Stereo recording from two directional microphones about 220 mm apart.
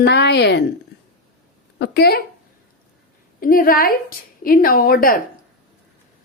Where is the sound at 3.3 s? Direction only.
40° left (ahead or behind).